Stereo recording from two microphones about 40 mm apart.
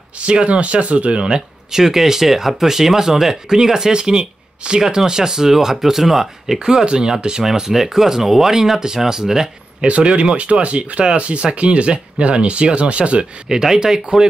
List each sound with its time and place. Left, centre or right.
0.3 s speech: right
1.2 s speech: centre
9.8 s speech: right
13.5 s speech: centre